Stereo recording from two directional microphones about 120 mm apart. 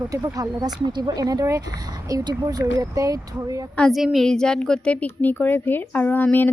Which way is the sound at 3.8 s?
Centre (ahead or behind).